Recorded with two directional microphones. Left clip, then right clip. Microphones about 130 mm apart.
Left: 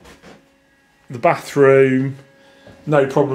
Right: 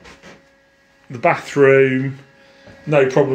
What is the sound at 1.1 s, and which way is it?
Speech, 10° left (ahead or behind).